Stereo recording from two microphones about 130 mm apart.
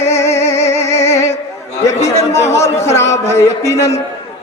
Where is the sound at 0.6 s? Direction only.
20° left (ahead or behind).